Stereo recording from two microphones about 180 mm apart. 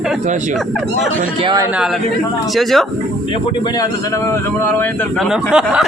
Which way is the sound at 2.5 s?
Centre (ahead or behind).